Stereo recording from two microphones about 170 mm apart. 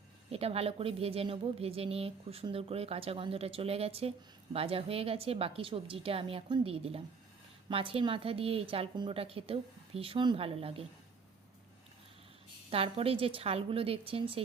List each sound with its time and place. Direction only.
0.3 s speech: 35° right (ahead or behind)
12.7 s speech: 35° right (ahead or behind)